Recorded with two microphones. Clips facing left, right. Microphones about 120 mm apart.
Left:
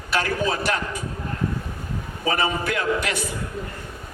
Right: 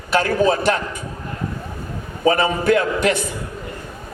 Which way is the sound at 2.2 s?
35° right (ahead or behind).